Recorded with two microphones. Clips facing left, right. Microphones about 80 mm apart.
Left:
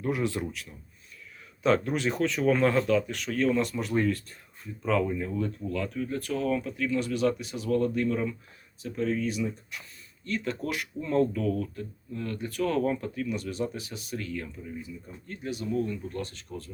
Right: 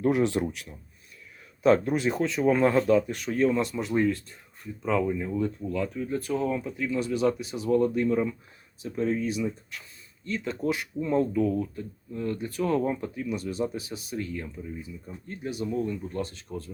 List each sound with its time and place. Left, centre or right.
0.1 s speech: right
1.9 s speech: centre
2.4 s speech: centre
3.5 s speech: centre; by 9.4 s right
9.7 s speech: centre
10.3 s speech: centre